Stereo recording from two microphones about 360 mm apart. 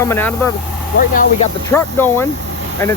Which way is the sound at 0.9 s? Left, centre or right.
Left.